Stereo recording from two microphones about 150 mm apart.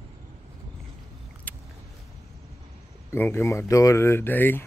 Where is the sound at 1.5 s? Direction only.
10° left (ahead or behind).